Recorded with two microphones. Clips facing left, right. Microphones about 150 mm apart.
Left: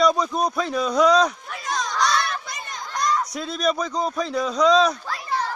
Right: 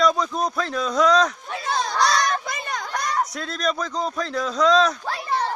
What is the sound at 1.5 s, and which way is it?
Children playing, 30° right (ahead or behind).